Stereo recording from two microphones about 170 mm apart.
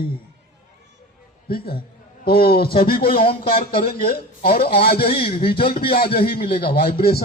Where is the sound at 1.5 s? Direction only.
60° left (ahead or behind).